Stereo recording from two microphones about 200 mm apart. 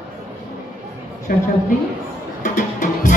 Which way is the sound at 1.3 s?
40° left (ahead or behind).